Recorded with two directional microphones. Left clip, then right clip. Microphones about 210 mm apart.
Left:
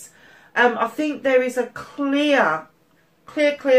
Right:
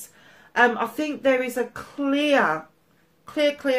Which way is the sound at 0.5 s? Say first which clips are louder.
Left 2 dB; 45° right (ahead or behind).